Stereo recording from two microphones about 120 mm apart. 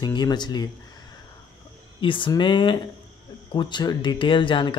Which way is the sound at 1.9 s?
45° left (ahead or behind).